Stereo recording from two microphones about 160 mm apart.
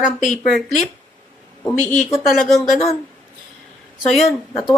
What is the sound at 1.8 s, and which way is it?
Speech, 5° left (ahead or behind).